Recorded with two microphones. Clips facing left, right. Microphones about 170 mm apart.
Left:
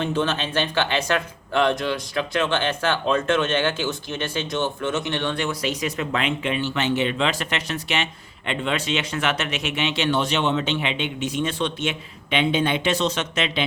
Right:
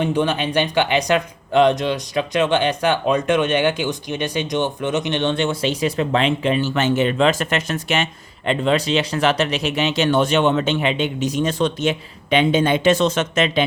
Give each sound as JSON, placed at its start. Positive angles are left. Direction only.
{"t": 0.0, "sound": "speech", "side_deg": -15}